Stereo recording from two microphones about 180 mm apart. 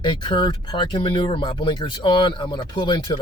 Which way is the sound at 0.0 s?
25° left (ahead or behind).